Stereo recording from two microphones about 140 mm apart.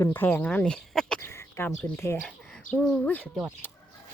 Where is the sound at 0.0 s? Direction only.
15° left (ahead or behind).